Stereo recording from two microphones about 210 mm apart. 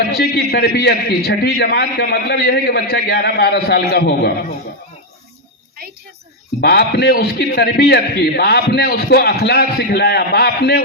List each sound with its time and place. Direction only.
0.2 s a man's voice: 50° left (ahead or behind)
6.6 s a man's voice: 50° left (ahead or behind)